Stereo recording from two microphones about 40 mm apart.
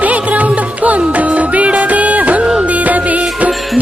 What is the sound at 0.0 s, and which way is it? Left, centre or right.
Music, right.